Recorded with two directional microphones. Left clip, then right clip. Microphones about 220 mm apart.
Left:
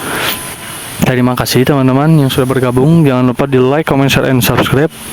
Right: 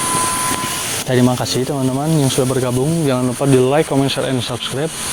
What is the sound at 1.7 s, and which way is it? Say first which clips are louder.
Speech: left 9 dB; 50° left (ahead or behind).